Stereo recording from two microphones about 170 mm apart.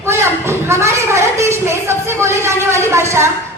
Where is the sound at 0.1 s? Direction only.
15° right (ahead or behind).